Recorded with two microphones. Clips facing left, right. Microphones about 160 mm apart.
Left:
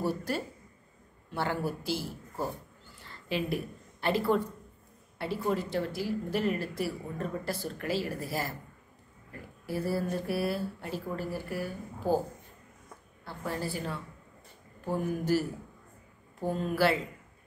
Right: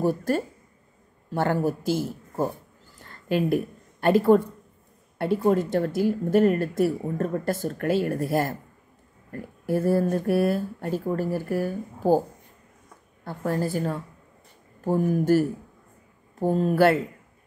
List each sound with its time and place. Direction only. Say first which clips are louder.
0.0 s speech: right 8 dB; 45° right (ahead or behind)
3.0 s a sound: right 8 dB; 50° right (ahead or behind)
5.2 s speech: right 9 dB; 50° right (ahead or behind)
13.2 s speech: right 8 dB; 45° right (ahead or behind)